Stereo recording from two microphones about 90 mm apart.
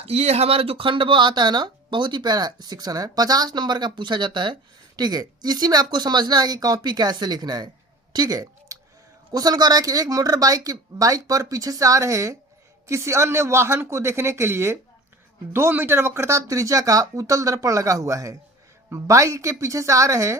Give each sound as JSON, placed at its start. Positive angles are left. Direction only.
{"t": 0.0, "sound": "speech", "side_deg": -90}
{"t": 8.1, "sound": "a sound", "side_deg": -45}
{"t": 9.3, "sound": "speech", "side_deg": -45}